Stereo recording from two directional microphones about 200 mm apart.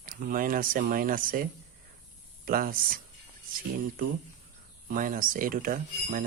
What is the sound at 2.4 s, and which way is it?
Speech, 45° right (ahead or behind).